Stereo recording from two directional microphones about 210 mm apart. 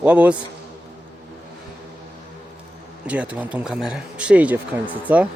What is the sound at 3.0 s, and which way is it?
Speech, 5° right (ahead or behind).